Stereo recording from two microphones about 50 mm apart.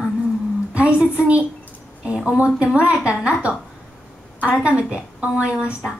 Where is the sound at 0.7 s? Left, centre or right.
Right.